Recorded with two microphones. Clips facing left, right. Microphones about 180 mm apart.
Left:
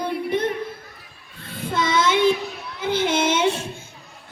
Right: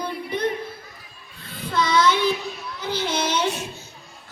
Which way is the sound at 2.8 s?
50° left (ahead or behind).